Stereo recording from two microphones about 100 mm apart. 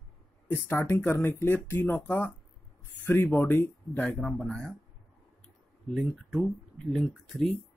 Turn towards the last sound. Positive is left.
turn(degrees=0)  # may be behind; listen again after turning